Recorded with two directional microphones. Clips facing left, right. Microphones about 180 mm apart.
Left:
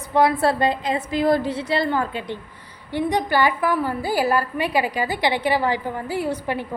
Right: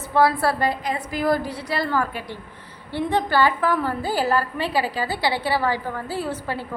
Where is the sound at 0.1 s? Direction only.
20° left (ahead or behind).